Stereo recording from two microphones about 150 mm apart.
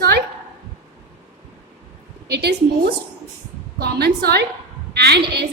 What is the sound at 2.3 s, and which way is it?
A woman's voice, 90° right.